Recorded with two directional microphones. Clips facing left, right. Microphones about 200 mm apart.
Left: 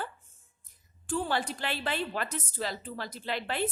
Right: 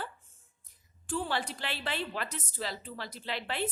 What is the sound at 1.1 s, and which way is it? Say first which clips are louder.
A woman's voice: left 3 dB; 45° left (ahead or behind).